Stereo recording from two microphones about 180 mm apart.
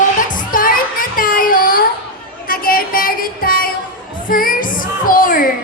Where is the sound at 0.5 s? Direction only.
50° left (ahead or behind).